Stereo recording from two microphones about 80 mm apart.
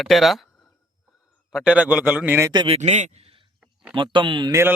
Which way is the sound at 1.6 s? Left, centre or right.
Centre.